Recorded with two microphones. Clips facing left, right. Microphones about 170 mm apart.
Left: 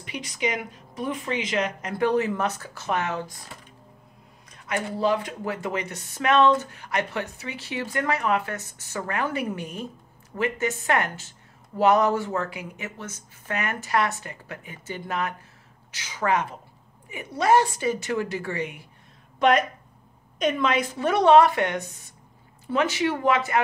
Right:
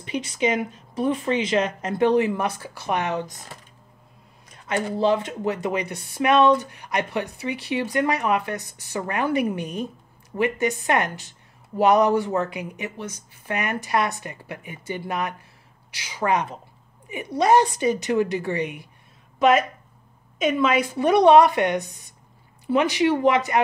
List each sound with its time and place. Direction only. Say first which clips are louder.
0.0 s a woman's voice: right 5 dB; 30° right (ahead or behind)
4.6 s speech: right 3 dB; 25° right (ahead or behind)
19.3 s a sound: right 2 dB; 5° right (ahead or behind)
20.3 s speech: right 3 dB; 5° right (ahead or behind)